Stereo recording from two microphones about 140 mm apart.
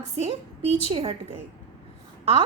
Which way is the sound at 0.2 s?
45° right (ahead or behind).